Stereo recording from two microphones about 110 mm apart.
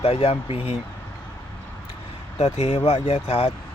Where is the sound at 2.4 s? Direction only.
75° left (ahead or behind); by 3.5 s 55° left (ahead or behind).